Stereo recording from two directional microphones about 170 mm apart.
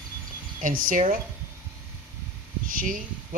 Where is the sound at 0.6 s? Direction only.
55° right (ahead or behind).